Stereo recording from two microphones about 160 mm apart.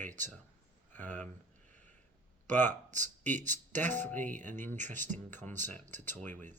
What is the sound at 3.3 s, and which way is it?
Speech, 50° right (ahead or behind).